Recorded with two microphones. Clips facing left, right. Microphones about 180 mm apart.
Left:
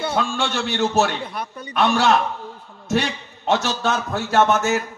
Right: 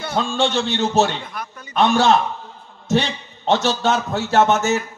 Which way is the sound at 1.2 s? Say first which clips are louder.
Left 3 dB; 30° left (ahead or behind).